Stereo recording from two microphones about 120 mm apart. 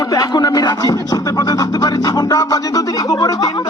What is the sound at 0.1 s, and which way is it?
Speech, 35° left (ahead or behind).